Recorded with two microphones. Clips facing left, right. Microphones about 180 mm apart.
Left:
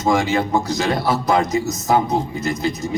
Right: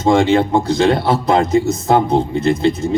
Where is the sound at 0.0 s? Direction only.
30° right (ahead or behind).